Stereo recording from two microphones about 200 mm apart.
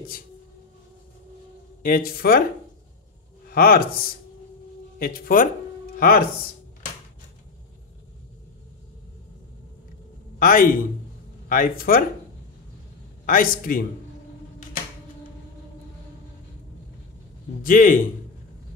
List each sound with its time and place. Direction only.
1.8 s a man's voice: 45° left (ahead or behind)
3.4 s a man's voice: 50° left (ahead or behind)
10.4 s a man's voice: 45° left (ahead or behind)
13.2 s a man's voice: 45° left (ahead or behind)
17.6 s a man's voice: 40° left (ahead or behind)